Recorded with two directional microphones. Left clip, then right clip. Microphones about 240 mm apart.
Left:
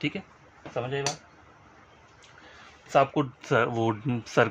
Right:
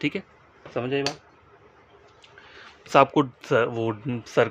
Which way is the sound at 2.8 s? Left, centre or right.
Right.